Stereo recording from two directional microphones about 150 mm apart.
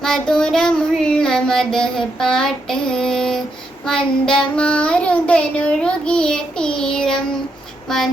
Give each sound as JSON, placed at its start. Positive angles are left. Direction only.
{"t": 0.0, "sound": "child singing", "side_deg": 5}